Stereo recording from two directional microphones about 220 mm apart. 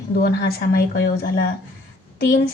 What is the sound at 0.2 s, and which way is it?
A woman's voice, 45° left (ahead or behind).